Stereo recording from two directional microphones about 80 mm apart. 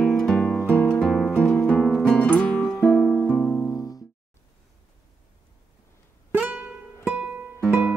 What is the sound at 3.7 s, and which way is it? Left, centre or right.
Music, left.